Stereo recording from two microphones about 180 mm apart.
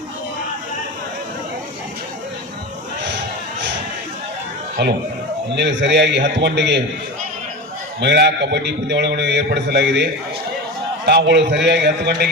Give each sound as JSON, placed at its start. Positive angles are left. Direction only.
{"t": 3.0, "sound": "a sound", "side_deg": -80}
{"t": 4.8, "sound": "a man's voice", "side_deg": -75}
{"t": 8.0, "sound": "a man's voice", "side_deg": -70}